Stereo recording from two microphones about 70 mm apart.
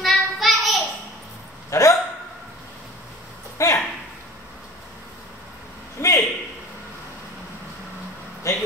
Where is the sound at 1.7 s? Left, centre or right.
Left.